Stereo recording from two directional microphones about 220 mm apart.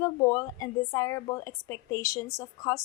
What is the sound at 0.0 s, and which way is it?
A woman's voice, 15° left (ahead or behind).